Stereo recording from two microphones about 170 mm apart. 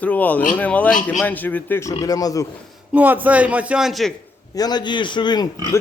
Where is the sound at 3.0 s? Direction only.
10° right (ahead or behind).